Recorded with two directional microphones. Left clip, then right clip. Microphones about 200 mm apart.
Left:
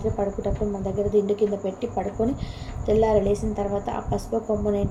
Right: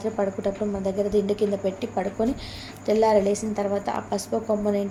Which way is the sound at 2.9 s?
60° right (ahead or behind).